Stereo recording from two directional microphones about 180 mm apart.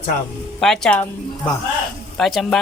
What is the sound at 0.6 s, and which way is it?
Speech, 5° left (ahead or behind).